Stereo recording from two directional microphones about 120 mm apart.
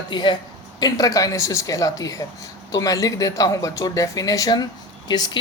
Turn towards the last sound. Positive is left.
turn(degrees=35)  # may be behind; listen again after turning